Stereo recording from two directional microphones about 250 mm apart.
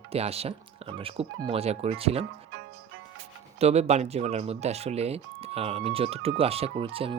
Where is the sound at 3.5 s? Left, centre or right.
Right.